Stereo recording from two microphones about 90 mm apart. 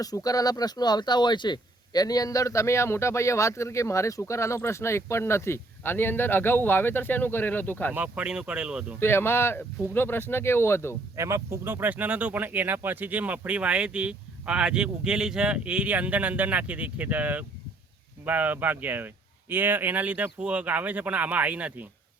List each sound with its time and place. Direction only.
0.0 s speech: 45° left (ahead or behind); by 7.9 s 20° left (ahead or behind)
7.9 s speech: 15° right (ahead or behind)
9.0 s speech: 25° left (ahead or behind)
11.2 s speech: 30° right (ahead or behind)